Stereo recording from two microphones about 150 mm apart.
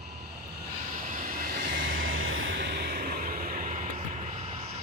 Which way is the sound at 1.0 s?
60° right (ahead or behind).